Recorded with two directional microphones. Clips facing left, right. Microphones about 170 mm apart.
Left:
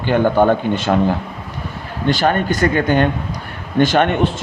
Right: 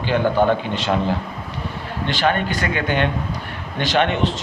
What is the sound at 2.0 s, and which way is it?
Speech, 45° left (ahead or behind).